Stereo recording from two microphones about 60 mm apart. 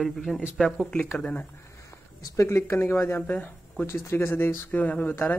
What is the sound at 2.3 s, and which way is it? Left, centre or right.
Speech, left.